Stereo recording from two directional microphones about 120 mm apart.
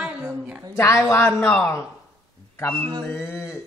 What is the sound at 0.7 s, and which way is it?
Speech, 25° left (ahead or behind).